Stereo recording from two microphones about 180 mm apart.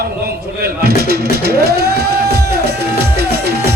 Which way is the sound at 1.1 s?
60° right (ahead or behind).